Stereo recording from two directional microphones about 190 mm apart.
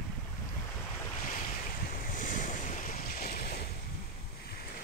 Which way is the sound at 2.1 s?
45° left (ahead or behind).